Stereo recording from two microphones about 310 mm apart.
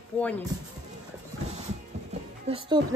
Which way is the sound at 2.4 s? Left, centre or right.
Centre.